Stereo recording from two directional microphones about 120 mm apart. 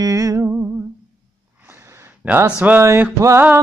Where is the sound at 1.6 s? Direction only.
20° right (ahead or behind).